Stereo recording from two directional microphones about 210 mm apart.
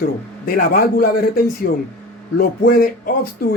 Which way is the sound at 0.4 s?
45° left (ahead or behind).